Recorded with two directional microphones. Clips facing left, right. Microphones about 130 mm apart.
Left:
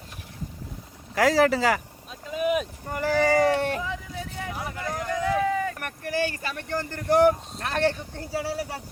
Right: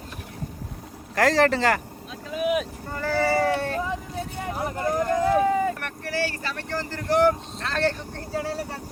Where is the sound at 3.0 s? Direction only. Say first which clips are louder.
Left 1 dB; 15° left (ahead or behind).